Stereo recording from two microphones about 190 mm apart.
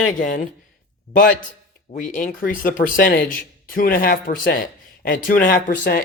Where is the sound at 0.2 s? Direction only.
45° left (ahead or behind).